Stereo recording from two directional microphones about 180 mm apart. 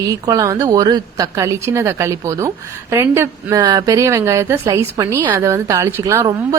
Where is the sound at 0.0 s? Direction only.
20° right (ahead or behind).